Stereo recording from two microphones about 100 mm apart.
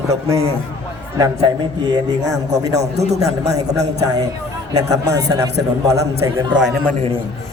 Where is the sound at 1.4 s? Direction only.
45° right (ahead or behind).